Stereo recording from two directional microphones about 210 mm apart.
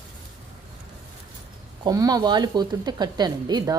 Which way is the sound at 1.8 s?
15° right (ahead or behind).